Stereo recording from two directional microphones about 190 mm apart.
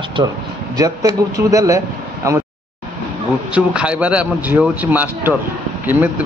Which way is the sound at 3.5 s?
5° right (ahead or behind).